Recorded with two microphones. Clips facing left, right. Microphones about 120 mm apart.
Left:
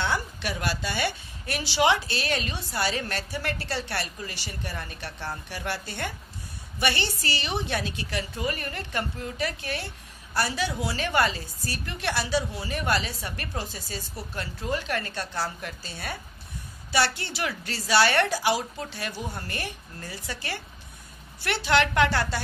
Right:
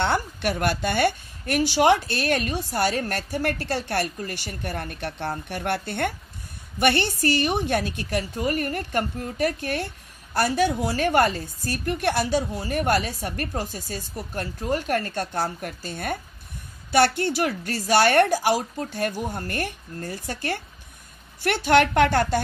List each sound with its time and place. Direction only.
0.0 s a woman's voice: 55° right (ahead or behind)